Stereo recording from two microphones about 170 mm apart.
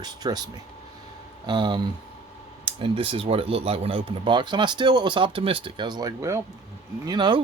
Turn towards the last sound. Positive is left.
turn(degrees=-25)  # may be behind; listen again after turning